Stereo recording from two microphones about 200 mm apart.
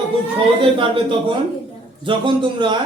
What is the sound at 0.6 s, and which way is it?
Speech, 25° right (ahead or behind).